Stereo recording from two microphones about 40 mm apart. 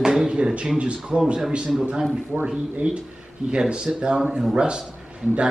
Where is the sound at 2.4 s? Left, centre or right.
Right.